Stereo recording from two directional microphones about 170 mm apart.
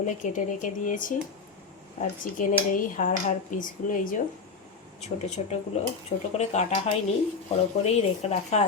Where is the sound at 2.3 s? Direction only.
50° left (ahead or behind).